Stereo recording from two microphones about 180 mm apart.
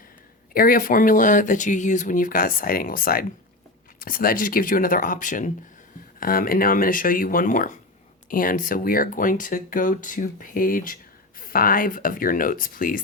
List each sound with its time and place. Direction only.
0.5 s speech: 50° left (ahead or behind)